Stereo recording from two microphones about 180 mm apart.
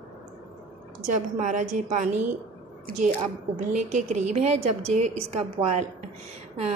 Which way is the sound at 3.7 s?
40° right (ahead or behind).